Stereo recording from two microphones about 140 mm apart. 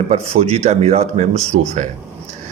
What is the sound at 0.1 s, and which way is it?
Speech, 50° right (ahead or behind).